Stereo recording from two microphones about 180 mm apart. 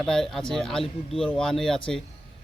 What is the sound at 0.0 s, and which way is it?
Speech, 5° left (ahead or behind).